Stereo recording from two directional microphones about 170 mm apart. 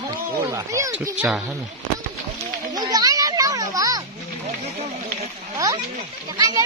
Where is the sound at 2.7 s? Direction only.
20° right (ahead or behind).